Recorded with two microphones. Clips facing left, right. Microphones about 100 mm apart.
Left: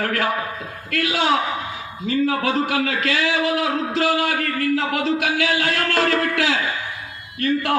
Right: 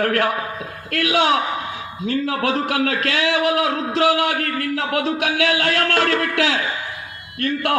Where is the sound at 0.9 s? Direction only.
60° right (ahead or behind).